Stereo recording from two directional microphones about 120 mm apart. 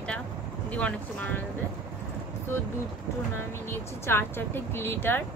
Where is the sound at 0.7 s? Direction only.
10° left (ahead or behind).